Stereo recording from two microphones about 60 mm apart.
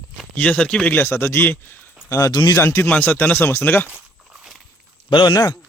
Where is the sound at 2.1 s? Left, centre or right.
Left.